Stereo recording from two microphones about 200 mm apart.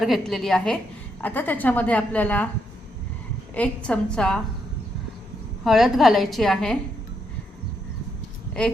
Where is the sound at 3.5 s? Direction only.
5° left (ahead or behind).